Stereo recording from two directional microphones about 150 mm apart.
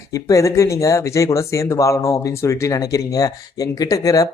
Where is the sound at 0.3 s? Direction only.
20° left (ahead or behind).